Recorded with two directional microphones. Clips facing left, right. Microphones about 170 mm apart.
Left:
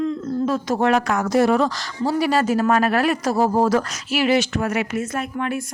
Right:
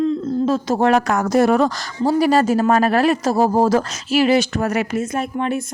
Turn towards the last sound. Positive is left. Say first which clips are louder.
# right 3 dB
turn(degrees=-25)  # may be behind; listen again after turning